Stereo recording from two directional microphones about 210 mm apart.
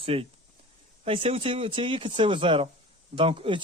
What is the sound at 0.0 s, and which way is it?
Speech, 25° right (ahead or behind).